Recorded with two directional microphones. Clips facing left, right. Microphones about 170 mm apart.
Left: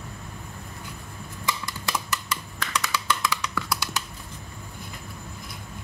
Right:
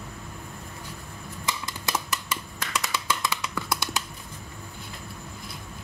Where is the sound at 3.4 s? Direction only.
20° right (ahead or behind).